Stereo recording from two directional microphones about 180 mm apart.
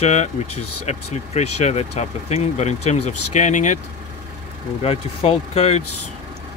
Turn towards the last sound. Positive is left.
turn(degrees=35)  # may be behind; listen again after turning